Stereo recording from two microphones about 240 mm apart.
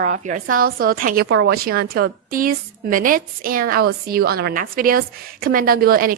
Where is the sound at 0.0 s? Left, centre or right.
Right.